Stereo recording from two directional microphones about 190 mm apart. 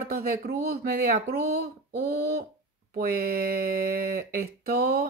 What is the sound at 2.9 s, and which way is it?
Speech, 50° right (ahead or behind).